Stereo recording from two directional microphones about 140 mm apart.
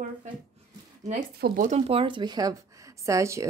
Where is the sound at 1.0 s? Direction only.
70° right (ahead or behind).